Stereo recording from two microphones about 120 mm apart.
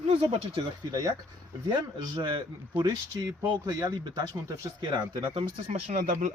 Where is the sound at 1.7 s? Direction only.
40° right (ahead or behind).